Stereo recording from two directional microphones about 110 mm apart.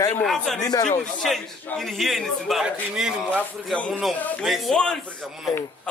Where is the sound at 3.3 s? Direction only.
10° left (ahead or behind).